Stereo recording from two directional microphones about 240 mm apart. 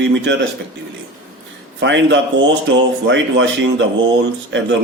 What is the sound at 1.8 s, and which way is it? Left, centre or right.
A man's voice, right.